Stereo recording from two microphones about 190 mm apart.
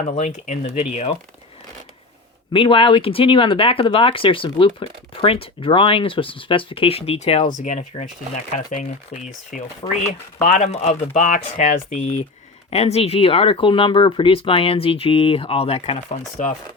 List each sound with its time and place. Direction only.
0.0 s speech: 40° left (ahead or behind)
2.5 s speech: 25° left (ahead or behind)
16.4 s speech: 45° left (ahead or behind)